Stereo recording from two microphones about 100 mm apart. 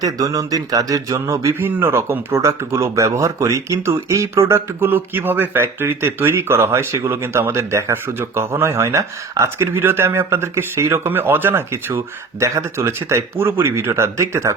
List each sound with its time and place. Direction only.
0.0 s speech: 35° right (ahead or behind)
1.5 s speech: 20° right (ahead or behind)